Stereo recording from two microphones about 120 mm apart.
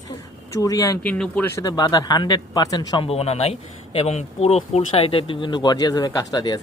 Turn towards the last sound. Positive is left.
turn(degrees=35)  # may be behind; listen again after turning